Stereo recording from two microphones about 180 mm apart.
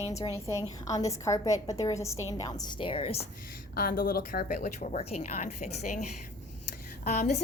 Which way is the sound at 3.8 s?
55° left (ahead or behind).